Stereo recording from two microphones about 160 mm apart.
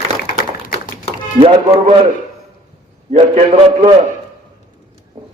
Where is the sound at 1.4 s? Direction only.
30° right (ahead or behind).